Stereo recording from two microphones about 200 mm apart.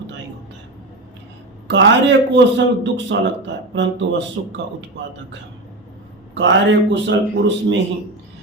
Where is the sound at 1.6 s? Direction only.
60° right (ahead or behind).